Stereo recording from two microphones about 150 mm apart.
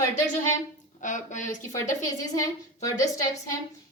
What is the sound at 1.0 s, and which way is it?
Speech, 55° left (ahead or behind).